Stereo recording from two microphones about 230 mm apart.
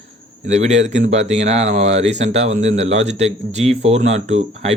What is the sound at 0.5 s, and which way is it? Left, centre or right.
A man's voice, right.